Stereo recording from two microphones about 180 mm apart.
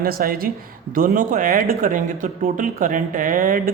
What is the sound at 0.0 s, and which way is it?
A man's voice, 55° right (ahead or behind).